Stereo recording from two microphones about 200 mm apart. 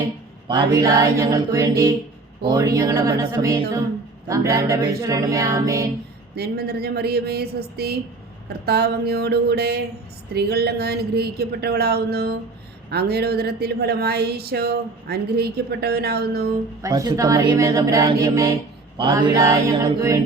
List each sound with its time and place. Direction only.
0.4 s mantra: 25° right (ahead or behind)
2.8 s music: 15° right (ahead or behind)
6.3 s speech: 50° right (ahead or behind)
16.8 s music: 20° right (ahead or behind)
18.2 s mantra: 20° right (ahead or behind)
18.9 s music: 25° right (ahead or behind)